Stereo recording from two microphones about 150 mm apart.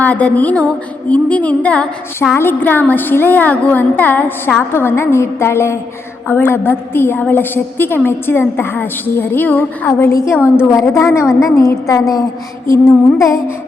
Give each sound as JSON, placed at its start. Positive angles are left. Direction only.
{"t": 0.0, "sound": "a woman's voice", "side_deg": 10}
{"t": 10.6, "sound": "music", "side_deg": 20}